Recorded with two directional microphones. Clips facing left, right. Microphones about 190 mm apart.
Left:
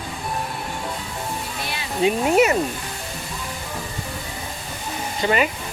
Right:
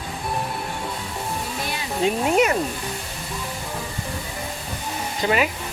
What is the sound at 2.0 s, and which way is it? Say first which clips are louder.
Speech: left 2 dB; 5° left (ahead or behind).